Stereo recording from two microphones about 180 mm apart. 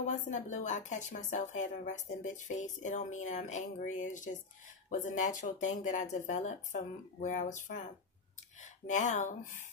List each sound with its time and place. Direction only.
0.0 s speech: 40° left (ahead or behind)
8.8 s speech: 45° left (ahead or behind)